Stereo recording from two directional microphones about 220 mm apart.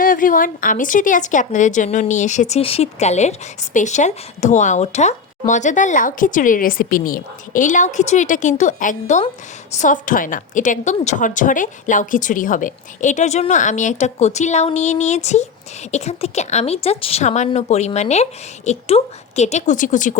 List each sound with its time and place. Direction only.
0.0 s a woman's voice: 40° left (ahead or behind)